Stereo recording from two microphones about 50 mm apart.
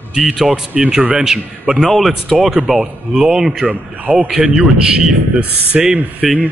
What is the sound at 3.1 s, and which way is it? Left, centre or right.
Speech, right.